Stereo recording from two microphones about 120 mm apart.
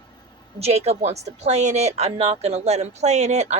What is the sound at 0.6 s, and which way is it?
Speech, 60° right (ahead or behind).